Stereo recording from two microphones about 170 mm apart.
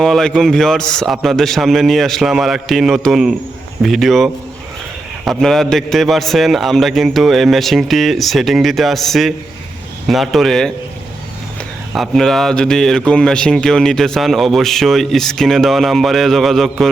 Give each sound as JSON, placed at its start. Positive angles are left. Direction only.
{"t": 0.0, "sound": "a man's voice", "side_deg": 0}
{"t": 11.9, "sound": "a man's voice", "side_deg": 0}